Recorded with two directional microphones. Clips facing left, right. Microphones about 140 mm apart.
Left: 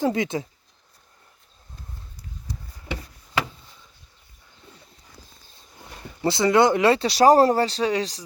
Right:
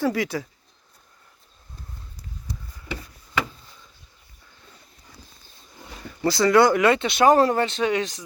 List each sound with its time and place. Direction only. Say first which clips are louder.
0.0 s speech: left 1 dB; 20° left (ahead or behind)
6.2 s speech: right 1 dB; 25° left (ahead or behind)